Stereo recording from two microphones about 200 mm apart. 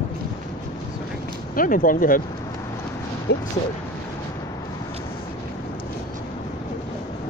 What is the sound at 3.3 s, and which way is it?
Speech, 55° left (ahead or behind).